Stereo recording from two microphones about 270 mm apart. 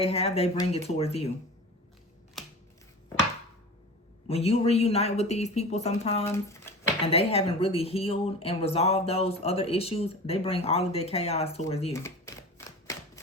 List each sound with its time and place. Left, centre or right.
0.0 s speech: left
4.3 s speech: left
6.7 s a sound: centre
7.0 s speech: left
11.9 s typewriter: centre